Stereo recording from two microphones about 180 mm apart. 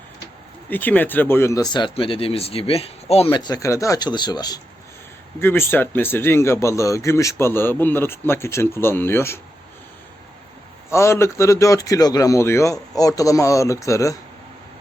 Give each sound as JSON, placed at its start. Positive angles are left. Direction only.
{"t": 0.7, "sound": "speech", "side_deg": 10}
{"t": 3.2, "sound": "speech", "side_deg": 20}
{"t": 5.4, "sound": "speech", "side_deg": 10}
{"t": 10.8, "sound": "speech", "side_deg": 15}